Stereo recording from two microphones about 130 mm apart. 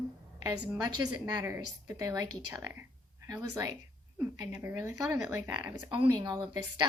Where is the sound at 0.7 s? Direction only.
35° right (ahead or behind).